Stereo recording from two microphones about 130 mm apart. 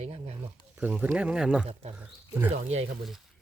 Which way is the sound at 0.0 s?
55° right (ahead or behind).